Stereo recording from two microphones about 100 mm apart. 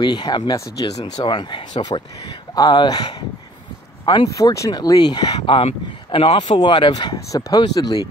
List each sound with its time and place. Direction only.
0.0 s speech: 45° left (ahead or behind)
4.0 s speech: 60° left (ahead or behind)
4.3 s speech: 35° left (ahead or behind); by 5.7 s 55° left (ahead or behind)
6.1 s speech: 65° left (ahead or behind); by 6.6 s 80° left
6.6 s speech: 50° left (ahead or behind)